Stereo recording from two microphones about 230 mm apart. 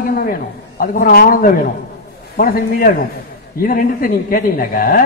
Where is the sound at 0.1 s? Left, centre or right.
Left.